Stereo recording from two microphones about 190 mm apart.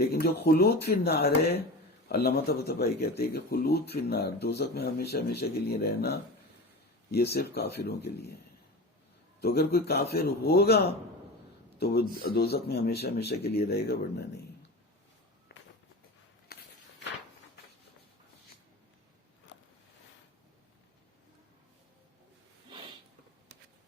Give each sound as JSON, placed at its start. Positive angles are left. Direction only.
{"t": 0.0, "sound": "speech", "side_deg": 55}
{"t": 9.4, "sound": "speech", "side_deg": 55}
{"t": 15.5, "sound": "walk", "side_deg": 60}